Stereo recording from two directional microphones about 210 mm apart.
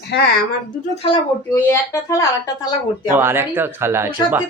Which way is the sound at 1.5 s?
10° left (ahead or behind).